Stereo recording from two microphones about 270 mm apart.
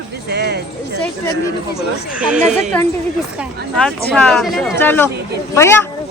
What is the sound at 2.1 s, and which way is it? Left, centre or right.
Speech, centre.